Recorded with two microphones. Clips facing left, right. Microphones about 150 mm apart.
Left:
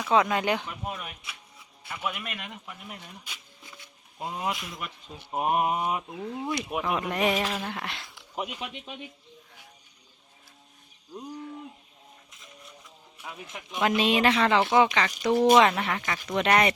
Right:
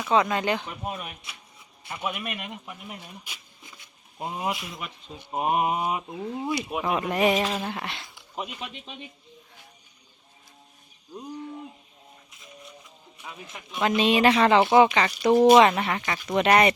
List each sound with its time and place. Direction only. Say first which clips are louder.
0.0 s speech: right 1 dB; 5° left (ahead or behind)
0.6 s speech: right 2 dB; 20° right (ahead or behind)
4.5 s speech: right 1 dB; centre (ahead or behind)
7.5 s a sound: right 2 dB; 10° right (ahead or behind)
8.4 s speech: left 1 dB; 10° left (ahead or behind)
11.1 s speech: right 1 dB; centre (ahead or behind)
13.2 s speech: left 1 dB; 5° left (ahead or behind)
14.3 s speech: right 4 dB; 20° right (ahead or behind)
15.5 s speech: right 3 dB; 10° right (ahead or behind)